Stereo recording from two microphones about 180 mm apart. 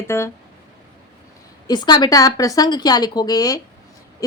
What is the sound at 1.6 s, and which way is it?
Speech, 25° left (ahead or behind).